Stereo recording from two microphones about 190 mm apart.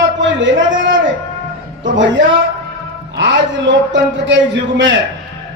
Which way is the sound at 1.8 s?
75° right (ahead or behind).